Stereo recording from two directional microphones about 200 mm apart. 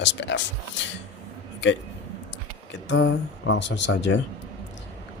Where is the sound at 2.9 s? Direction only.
70° left (ahead or behind).